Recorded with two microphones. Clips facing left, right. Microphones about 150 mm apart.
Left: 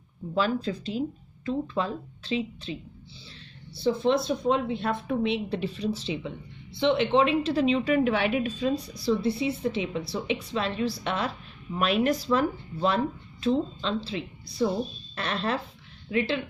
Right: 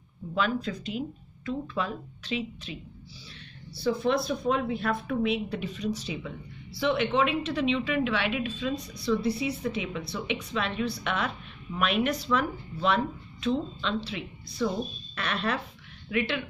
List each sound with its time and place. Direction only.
0.3 s speech: 30° left (ahead or behind)
15.1 s speech: 30° left (ahead or behind)